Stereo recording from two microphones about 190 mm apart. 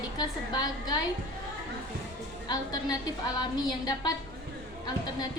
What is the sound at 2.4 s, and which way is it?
A woman's voice, 20° left (ahead or behind).